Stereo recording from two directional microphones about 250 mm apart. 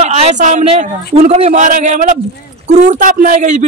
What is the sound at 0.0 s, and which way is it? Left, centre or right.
Speech, right.